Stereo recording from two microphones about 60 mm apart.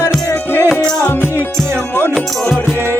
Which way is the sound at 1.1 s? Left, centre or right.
Left.